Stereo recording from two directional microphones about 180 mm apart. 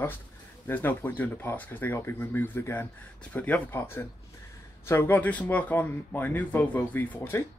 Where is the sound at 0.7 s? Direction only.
10° left (ahead or behind).